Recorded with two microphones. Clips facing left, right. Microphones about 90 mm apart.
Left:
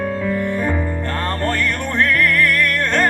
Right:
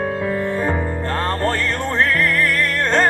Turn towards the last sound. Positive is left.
turn(degrees=-20)  # may be behind; listen again after turning